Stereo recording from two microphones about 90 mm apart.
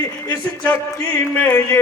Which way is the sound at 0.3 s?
20° left (ahead or behind).